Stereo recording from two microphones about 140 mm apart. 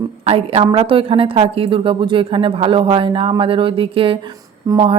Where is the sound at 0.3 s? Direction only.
45° right (ahead or behind).